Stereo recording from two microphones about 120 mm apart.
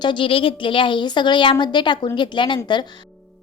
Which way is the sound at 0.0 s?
45° left (ahead or behind).